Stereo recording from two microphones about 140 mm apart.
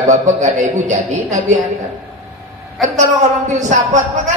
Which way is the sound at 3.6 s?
60° right (ahead or behind).